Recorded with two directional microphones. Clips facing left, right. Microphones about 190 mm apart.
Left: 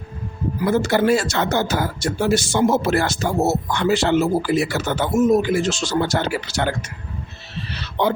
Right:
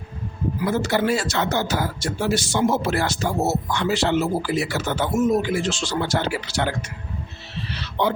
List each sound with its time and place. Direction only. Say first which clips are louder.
0.7 s speech: left 5 dB; 50° left (ahead or behind)
8.0 s speech: left 2 dB; 45° left (ahead or behind)